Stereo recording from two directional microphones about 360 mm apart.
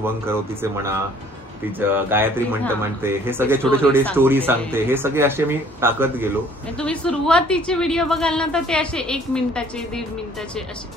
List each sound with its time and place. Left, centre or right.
0.0 s speech: centre